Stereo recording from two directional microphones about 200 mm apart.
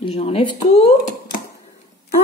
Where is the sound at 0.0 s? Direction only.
30° left (ahead or behind).